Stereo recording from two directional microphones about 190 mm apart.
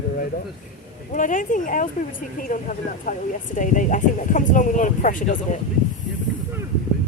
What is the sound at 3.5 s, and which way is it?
Speech, 40° left (ahead or behind).